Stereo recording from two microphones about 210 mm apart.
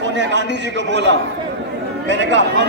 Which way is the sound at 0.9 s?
55° right (ahead or behind).